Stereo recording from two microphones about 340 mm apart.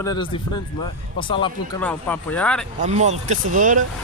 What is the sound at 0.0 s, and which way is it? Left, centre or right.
Speech, centre.